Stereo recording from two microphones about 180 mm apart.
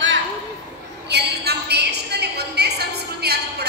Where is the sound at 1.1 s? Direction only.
65° right (ahead or behind).